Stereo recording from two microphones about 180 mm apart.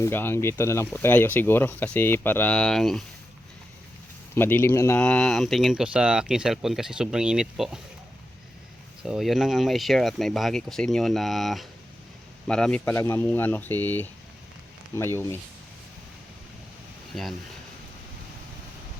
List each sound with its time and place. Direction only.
0.0 s speech: 10° left (ahead or behind)
4.4 s speech: 10° left (ahead or behind)
9.0 s speech: centre (ahead or behind); by 15.4 s 15° left (ahead or behind)
17.1 s speech: centre (ahead or behind)